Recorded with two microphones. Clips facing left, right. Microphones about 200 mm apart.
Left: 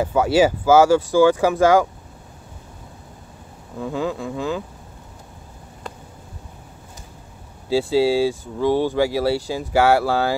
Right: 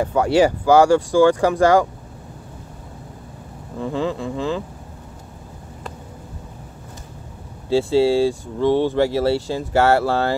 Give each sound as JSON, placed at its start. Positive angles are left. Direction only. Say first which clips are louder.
{"t": 0.0, "sound": "speech", "louder": "even", "side_deg": 5}
{"t": 3.8, "sound": "speech", "louder": "right 1 dB", "side_deg": 5}
{"t": 7.7, "sound": "speech", "louder": "right 2 dB", "side_deg": 5}